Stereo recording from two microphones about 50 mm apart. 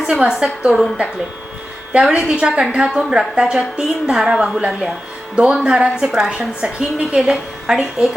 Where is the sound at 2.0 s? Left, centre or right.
Centre.